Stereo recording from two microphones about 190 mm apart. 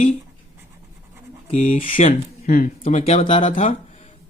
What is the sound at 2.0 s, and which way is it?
Speech, 45° left (ahead or behind).